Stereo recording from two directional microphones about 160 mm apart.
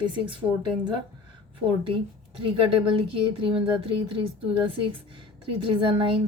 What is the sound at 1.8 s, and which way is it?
A woman's voice, 35° right (ahead or behind).